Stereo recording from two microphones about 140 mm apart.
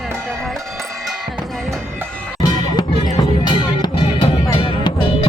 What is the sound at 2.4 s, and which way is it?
Music, 30° left (ahead or behind).